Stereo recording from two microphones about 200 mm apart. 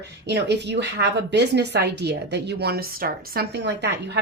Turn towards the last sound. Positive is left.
turn(degrees=-60)  # may be behind; listen again after turning